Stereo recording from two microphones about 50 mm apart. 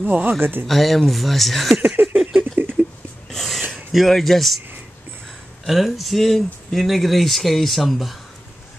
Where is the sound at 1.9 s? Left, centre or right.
Right.